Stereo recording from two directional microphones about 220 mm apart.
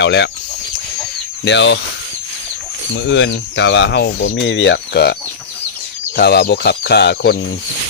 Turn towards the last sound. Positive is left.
turn(degrees=50)  # may be behind; listen again after turning